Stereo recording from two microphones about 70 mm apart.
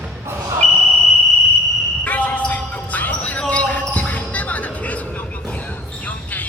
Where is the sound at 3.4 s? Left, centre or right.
Centre.